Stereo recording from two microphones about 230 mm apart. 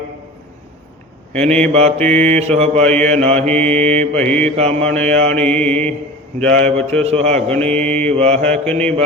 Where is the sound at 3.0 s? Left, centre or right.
Right.